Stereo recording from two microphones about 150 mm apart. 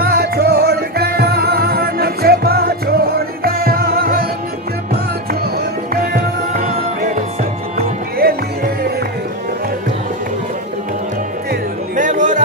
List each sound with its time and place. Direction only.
0.0 s music: 85° right
5.9 s music: 70° right (ahead or behind)
8.2 s music: 90° right
11.9 s music: 55° right (ahead or behind)